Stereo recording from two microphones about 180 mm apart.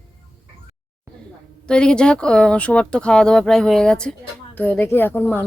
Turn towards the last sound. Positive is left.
turn(degrees=10)  # may be behind; listen again after turning